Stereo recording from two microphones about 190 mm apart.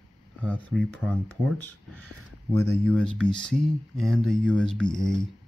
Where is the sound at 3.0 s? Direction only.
5° left (ahead or behind).